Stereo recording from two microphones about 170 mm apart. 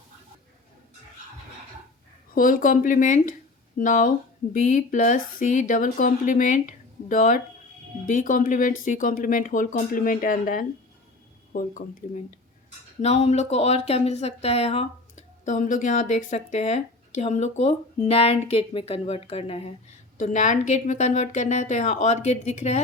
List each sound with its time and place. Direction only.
2.3 s speech: 55° left (ahead or behind)
13.0 s speech: 40° left (ahead or behind)
20.1 s speech: 45° left (ahead or behind)